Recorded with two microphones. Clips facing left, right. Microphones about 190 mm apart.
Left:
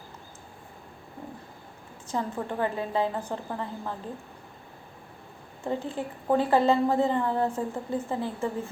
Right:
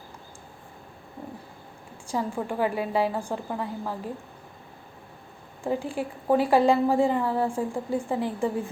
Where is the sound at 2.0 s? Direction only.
10° right (ahead or behind).